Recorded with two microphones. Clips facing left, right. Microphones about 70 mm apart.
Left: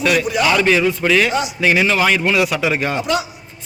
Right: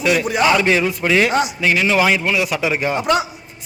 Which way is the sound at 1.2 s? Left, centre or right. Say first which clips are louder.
Right 2 dB; right.